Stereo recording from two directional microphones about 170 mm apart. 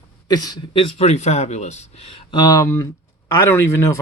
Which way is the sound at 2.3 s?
25° left (ahead or behind).